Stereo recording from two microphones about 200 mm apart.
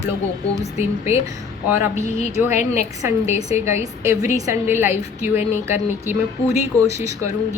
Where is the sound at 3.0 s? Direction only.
15° right (ahead or behind).